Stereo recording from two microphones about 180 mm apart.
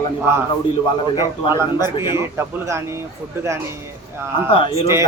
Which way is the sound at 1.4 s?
15° right (ahead or behind).